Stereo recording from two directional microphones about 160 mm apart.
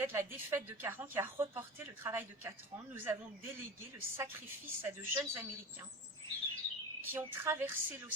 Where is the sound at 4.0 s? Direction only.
15° right (ahead or behind).